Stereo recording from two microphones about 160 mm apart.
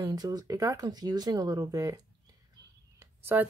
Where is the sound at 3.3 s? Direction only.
15° right (ahead or behind).